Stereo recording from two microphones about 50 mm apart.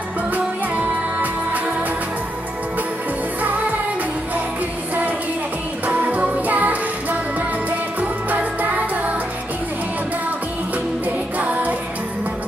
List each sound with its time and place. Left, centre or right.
5.9 s music: right
11.3 s music: right